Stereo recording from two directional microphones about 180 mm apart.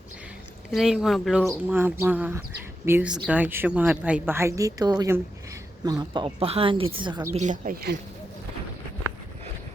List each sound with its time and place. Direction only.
0.7 s a woman's voice: centre (ahead or behind); by 7.3 s 25° right (ahead or behind)
7.3 s speech: 45° right (ahead or behind)